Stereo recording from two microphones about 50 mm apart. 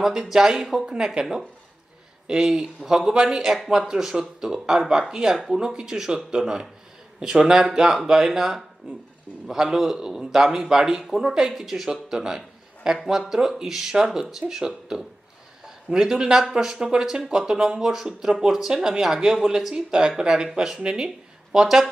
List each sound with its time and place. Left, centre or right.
0.0 s a man's voice: centre
2.2 s a man's voice: centre